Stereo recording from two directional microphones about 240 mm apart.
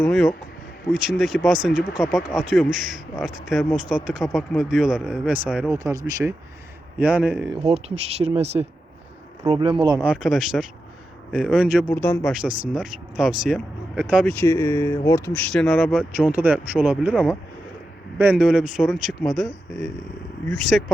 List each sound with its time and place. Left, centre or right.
0.0 s speech: centre
7.5 s speech: right
10.0 s speech: centre
11.9 s speech: centre
12.3 s speech: centre
14.4 s speech: centre